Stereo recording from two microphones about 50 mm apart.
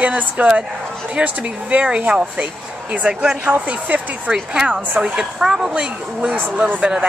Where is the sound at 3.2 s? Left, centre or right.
Centre.